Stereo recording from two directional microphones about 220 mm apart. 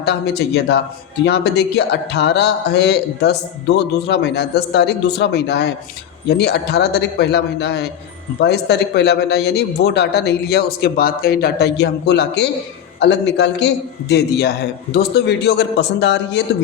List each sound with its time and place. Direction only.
0.0 s a man's voice: 50° left (ahead or behind)